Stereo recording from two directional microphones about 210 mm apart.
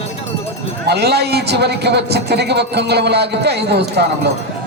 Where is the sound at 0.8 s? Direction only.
50° right (ahead or behind).